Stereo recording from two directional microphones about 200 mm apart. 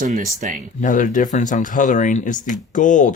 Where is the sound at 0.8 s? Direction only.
40° left (ahead or behind).